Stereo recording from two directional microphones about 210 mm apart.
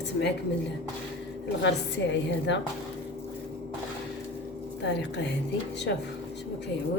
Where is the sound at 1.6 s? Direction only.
55° left (ahead or behind).